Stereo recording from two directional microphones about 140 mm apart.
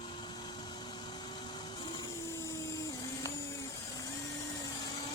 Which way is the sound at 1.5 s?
30° left (ahead or behind).